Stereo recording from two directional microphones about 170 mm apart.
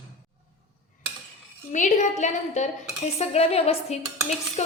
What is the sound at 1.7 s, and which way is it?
A woman's voice, 45° left (ahead or behind).